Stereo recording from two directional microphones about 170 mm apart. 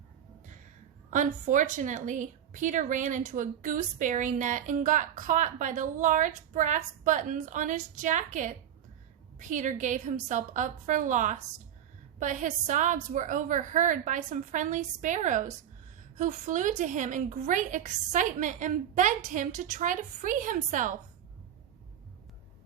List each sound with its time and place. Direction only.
1.1 s a woman's voice: 50° right (ahead or behind)